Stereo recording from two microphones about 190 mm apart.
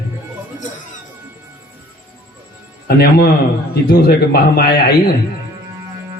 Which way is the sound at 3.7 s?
55° left (ahead or behind).